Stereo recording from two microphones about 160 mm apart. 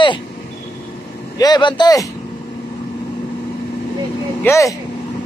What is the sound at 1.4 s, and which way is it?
Speech, 30° left (ahead or behind).